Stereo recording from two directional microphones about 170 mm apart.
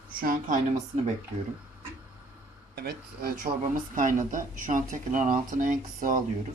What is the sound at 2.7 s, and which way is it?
A woman's voice, 70° right (ahead or behind).